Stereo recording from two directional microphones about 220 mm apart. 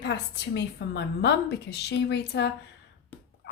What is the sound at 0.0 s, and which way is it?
A woman's voice, 50° left (ahead or behind).